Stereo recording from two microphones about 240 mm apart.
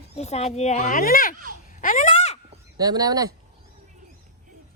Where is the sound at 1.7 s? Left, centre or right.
Left.